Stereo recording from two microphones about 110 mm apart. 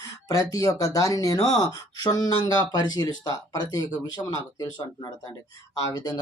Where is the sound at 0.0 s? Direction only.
35° left (ahead or behind).